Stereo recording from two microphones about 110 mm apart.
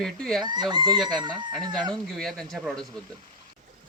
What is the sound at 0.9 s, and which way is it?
Speech, centre (ahead or behind).